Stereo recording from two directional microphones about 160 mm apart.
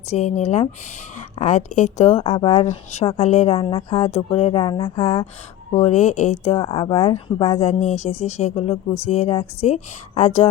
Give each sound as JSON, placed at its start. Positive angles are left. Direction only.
{"t": 0.1, "sound": "speech", "side_deg": 45}